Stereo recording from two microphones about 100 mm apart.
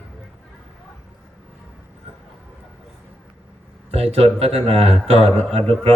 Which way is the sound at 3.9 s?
90° right.